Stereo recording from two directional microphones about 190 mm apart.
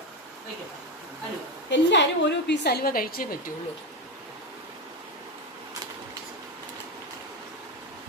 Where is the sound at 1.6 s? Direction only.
65° left (ahead or behind); by 3.5 s 50° left (ahead or behind).